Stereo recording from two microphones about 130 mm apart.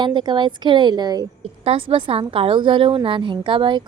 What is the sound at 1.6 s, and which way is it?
Speech, 45° right (ahead or behind).